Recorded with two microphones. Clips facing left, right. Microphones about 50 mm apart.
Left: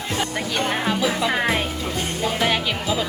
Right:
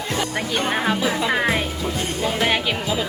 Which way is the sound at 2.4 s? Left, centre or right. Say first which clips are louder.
Right 1 dB; centre.